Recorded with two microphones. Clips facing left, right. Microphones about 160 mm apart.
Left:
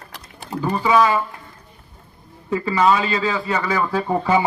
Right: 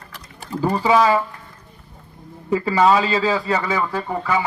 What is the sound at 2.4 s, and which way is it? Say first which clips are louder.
A man's voice: right 1 dB; 30° right (ahead or behind).